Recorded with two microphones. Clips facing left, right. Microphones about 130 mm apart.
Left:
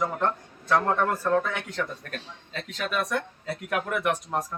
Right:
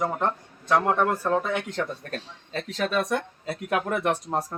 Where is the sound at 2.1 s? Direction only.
35° right (ahead or behind).